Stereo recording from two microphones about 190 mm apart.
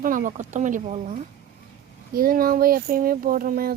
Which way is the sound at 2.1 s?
50° right (ahead or behind).